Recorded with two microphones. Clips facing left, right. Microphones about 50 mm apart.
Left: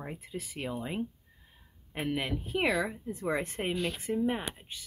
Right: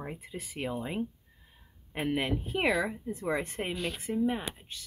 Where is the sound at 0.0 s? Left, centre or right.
Centre.